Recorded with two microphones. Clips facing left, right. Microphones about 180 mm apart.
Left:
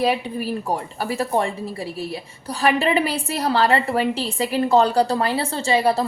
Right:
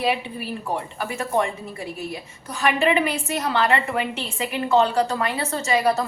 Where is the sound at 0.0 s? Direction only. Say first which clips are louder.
Left 3 dB; 40° left (ahead or behind).